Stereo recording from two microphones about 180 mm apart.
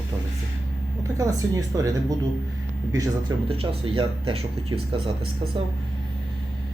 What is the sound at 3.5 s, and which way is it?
Speech, 30° right (ahead or behind).